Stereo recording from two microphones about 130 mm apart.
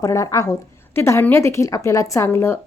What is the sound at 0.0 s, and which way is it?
A woman's voice, 25° left (ahead or behind).